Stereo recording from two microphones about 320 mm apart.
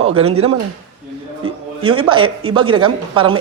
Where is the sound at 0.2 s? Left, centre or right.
Centre.